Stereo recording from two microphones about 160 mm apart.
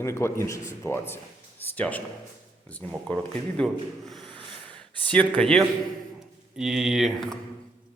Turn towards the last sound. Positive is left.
turn(degrees=0)  # may be behind; listen again after turning